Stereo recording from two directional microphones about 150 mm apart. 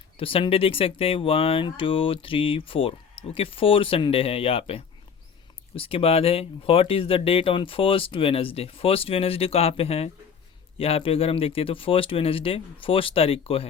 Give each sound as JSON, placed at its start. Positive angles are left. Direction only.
{"t": 0.2, "sound": "speech", "side_deg": 35}